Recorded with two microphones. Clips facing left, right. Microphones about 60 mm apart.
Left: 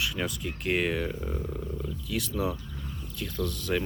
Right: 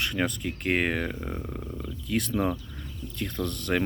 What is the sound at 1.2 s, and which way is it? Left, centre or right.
Speech, right.